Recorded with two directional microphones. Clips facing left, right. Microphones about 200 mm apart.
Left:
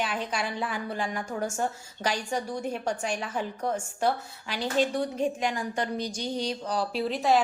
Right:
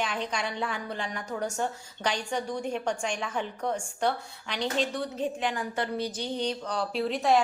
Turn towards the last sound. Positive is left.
turn(degrees=0)  # may be behind; listen again after turning